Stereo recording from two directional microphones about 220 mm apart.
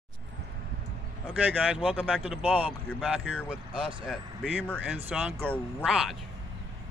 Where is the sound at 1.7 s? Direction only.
5° right (ahead or behind).